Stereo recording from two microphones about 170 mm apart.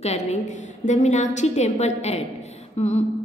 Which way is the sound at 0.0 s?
40° left (ahead or behind).